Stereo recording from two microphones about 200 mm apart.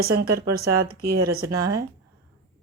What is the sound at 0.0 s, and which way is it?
A woman's voice, 50° right (ahead or behind).